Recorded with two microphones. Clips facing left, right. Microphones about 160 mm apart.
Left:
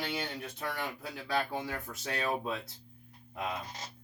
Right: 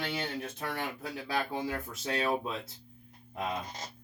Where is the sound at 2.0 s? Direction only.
25° right (ahead or behind).